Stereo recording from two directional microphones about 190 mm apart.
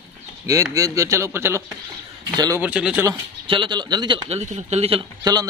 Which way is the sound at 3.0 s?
25° right (ahead or behind).